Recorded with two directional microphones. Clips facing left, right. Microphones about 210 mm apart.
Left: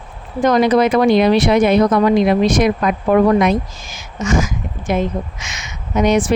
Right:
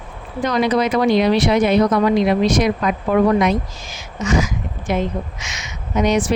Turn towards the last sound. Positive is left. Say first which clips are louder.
# left 3 dB
turn(degrees=50)  # may be behind; listen again after turning